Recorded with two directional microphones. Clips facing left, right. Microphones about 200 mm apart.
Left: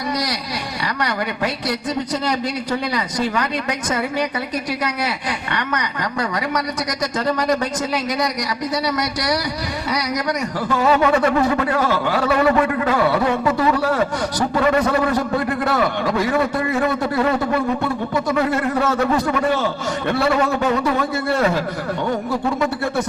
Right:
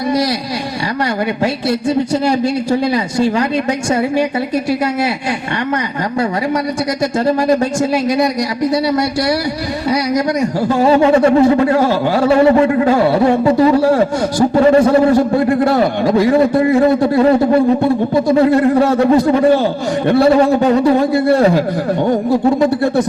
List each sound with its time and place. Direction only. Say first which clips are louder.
2.9 s speech: right 7 dB; 25° right (ahead or behind)
7.3 s speech: right 6 dB; 25° right (ahead or behind)
10.4 s a man's voice: right 5 dB; 30° right (ahead or behind)